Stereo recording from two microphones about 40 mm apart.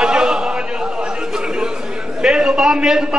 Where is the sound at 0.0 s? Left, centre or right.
Centre.